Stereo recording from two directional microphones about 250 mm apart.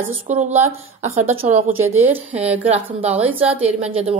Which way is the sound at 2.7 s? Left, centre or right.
Right.